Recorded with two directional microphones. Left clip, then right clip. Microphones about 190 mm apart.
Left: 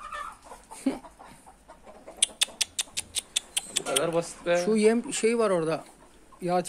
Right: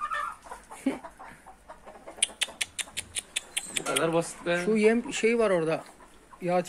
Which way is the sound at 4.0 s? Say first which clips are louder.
Right 2 dB; 55° right (ahead or behind).